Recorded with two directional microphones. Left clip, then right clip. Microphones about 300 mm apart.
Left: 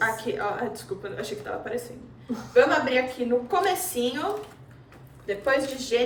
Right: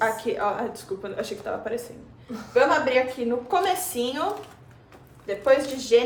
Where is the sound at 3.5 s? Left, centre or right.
Centre.